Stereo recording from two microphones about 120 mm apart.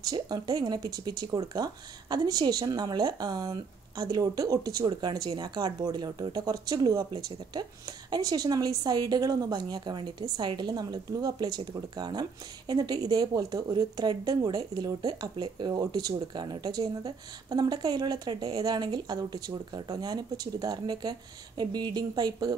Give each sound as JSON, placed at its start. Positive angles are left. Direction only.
{"t": 0.0, "sound": "speech", "side_deg": -35}
{"t": 8.1, "sound": "speech", "side_deg": -30}